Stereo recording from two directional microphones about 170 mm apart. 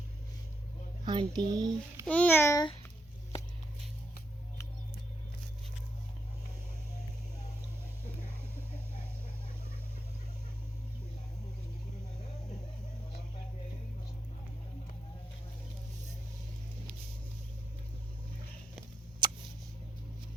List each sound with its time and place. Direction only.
1.0 s a child's voice: 25° right (ahead or behind)
2.0 s a child's voice: 10° left (ahead or behind)
19.2 s mouse: 25° right (ahead or behind)